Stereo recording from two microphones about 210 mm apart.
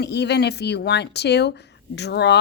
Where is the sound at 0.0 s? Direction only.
55° left (ahead or behind).